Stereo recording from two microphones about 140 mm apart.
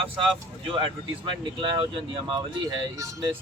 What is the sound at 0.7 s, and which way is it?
Speech, 40° right (ahead or behind).